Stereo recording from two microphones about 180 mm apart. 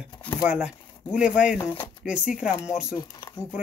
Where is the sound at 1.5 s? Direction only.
25° left (ahead or behind).